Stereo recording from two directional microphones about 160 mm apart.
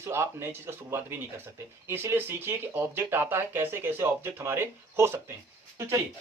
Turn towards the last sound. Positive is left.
turn(degrees=-20)  # may be behind; listen again after turning